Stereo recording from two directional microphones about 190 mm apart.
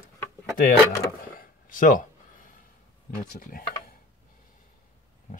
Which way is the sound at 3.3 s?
50° left (ahead or behind).